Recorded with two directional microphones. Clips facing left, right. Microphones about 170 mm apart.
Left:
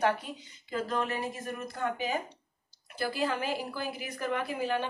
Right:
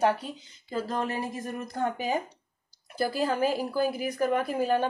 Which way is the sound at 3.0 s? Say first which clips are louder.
Right 5 dB; 40° right (ahead or behind).